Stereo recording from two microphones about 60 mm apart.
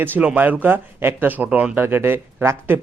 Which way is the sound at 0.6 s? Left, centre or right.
Right.